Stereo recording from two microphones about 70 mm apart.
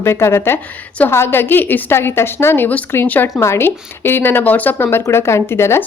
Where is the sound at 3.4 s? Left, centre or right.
Left.